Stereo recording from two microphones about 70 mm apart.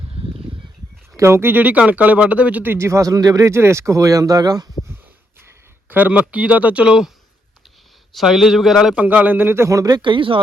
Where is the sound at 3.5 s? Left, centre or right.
Right.